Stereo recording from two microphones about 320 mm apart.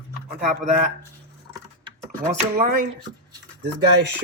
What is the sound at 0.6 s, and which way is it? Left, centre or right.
Speech, right.